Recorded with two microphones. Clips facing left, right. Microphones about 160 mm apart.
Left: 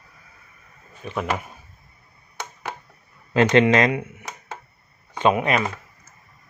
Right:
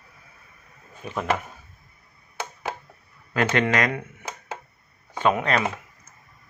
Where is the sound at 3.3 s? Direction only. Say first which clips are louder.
Left 6 dB; 25° left (ahead or behind).